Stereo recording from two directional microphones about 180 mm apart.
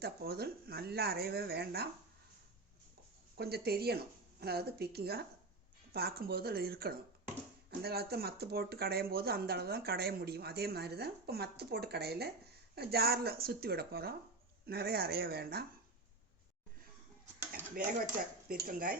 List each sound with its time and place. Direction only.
0.0 s speech: 60° right (ahead or behind)
3.3 s speech: 60° right (ahead or behind)
17.5 s speech: 55° right (ahead or behind)